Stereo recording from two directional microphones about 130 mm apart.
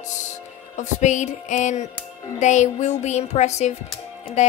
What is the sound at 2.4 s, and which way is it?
Speech, 65° left (ahead or behind).